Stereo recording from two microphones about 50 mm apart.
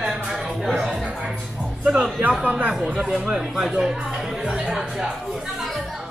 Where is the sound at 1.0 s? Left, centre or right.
Centre.